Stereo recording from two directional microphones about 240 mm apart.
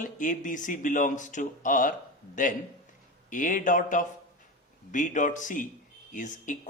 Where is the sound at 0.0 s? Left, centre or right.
Left.